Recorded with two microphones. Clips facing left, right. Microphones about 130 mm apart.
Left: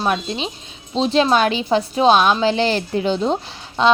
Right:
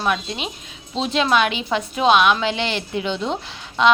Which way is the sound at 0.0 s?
30° left (ahead or behind).